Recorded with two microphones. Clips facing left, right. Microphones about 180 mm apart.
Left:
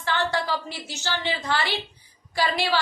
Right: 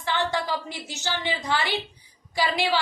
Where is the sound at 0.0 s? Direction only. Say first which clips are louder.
Left 1 dB; 15° right (ahead or behind).